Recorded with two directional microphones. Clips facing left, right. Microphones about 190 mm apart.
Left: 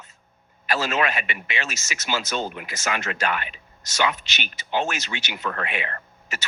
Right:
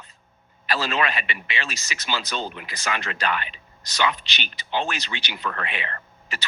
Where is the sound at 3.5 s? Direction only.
45° left (ahead or behind).